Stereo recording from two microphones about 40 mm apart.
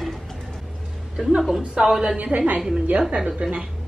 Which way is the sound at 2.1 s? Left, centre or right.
Right.